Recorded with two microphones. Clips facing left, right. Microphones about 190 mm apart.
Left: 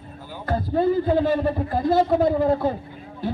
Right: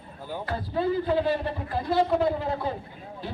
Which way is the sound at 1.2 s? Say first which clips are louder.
Left 6 dB; 45° left (ahead or behind).